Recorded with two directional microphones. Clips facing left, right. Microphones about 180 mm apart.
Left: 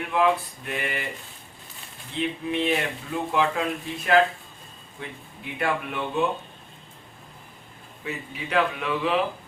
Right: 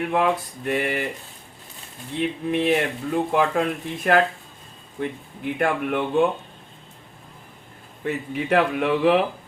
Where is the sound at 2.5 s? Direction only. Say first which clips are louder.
Right 5 dB; 45° right (ahead or behind).